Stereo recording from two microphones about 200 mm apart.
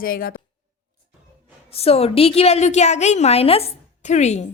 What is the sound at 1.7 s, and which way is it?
A woman's voice, 30° left (ahead or behind).